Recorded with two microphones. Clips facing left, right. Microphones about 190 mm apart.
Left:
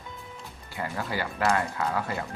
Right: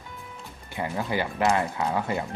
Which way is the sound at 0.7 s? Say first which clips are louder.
Right 4 dB; 20° right (ahead or behind).